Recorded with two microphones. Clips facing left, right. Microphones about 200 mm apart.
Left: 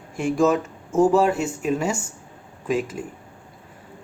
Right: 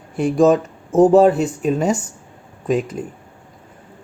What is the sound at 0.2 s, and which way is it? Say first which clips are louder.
Speech: right 5 dB; 35° right (ahead or behind).